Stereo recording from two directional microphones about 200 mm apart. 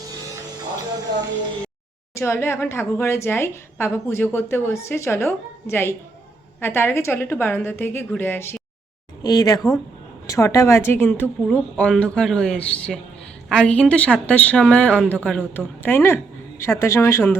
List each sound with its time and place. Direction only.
2.1 s a woman's voice: 15° left (ahead or behind)